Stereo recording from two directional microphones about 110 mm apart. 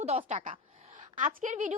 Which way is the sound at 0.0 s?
75° right (ahead or behind).